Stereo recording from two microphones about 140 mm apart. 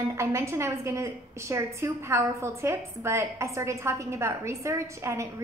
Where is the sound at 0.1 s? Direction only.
20° right (ahead or behind).